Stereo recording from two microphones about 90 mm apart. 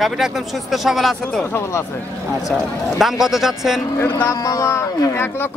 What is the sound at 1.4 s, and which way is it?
Speech, 30° left (ahead or behind).